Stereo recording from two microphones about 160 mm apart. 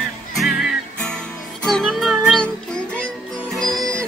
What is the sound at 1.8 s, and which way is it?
Music, centre (ahead or behind).